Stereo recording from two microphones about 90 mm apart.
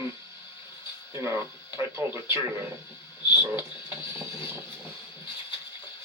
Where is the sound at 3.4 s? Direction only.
25° right (ahead or behind).